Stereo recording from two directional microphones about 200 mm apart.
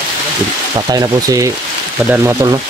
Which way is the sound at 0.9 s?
20° right (ahead or behind).